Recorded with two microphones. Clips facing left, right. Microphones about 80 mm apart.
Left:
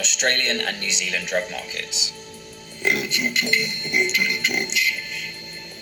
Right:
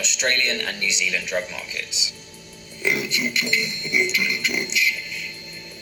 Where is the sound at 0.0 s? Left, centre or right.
Left.